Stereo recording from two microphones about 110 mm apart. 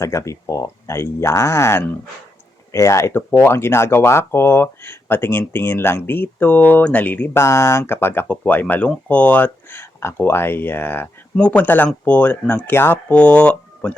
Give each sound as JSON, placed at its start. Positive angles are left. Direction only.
{"t": 0.0, "sound": "speech", "side_deg": 25}